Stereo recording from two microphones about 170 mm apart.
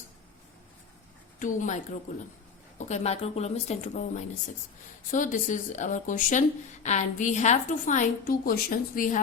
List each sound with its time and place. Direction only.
1.4 s a woman's voice: 50° left (ahead or behind)